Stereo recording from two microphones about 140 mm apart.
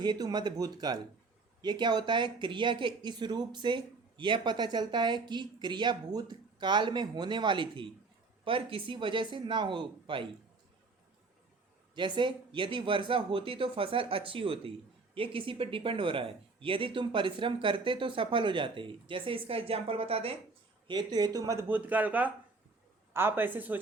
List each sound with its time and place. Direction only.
0.0 s a man's voice: 30° right (ahead or behind)
11.9 s speech: 35° right (ahead or behind)
20.8 s a man's voice: 30° right (ahead or behind); by 23.8 s 15° right (ahead or behind)